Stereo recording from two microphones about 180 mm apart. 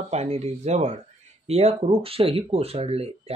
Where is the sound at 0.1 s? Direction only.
35° right (ahead or behind).